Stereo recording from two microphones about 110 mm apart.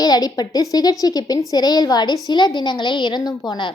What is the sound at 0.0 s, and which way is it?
A woman's voice, 35° left (ahead or behind).